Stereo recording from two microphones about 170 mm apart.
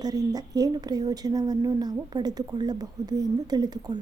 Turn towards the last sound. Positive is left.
turn(degrees=-25)  # may be behind; listen again after turning